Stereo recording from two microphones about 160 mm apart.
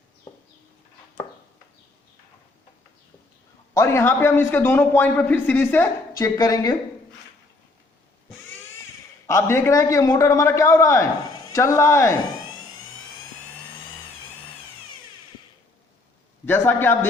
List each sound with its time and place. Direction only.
3.8 s a man's voice: 15° left (ahead or behind)
9.2 s a man's voice: 20° left (ahead or behind)
16.5 s a man's voice: 15° left (ahead or behind)